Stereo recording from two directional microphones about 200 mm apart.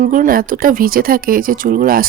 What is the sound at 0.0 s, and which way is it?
Speech, 45° right (ahead or behind).